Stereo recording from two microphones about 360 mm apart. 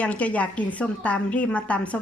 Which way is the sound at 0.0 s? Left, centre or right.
Centre.